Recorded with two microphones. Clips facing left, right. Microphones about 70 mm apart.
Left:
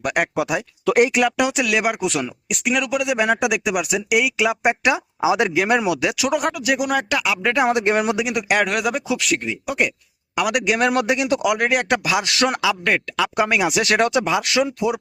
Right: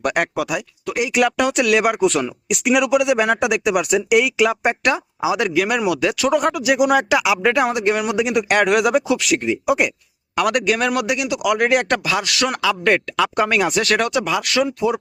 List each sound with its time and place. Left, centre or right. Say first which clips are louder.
0.0 s speech: right 1 dB; centre
0.3 s speech: left 1 dB; left
1.1 s speech: right 2 dB; centre
2.5 s speech: right 6 dB; centre
5.2 s speech: left 1 dB; left; by 6.6 s centre
6.6 s speech: right 4 dB; centre
7.7 s speech: left 1 dB; left
8.1 s speech: right 3 dB; centre
10.3 s speech: right 2 dB; centre
10.8 s speech: left 1 dB; left
11.6 s speech: right 2 dB; centre
11.9 s speech: left 1 dB; centre
12.6 s speech: right 2 dB; centre
14.0 s speech: left 1 dB; left